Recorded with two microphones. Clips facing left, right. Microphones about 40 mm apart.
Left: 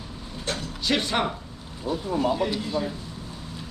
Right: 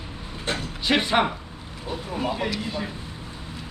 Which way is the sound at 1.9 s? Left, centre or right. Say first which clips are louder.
Left 4 dB; right.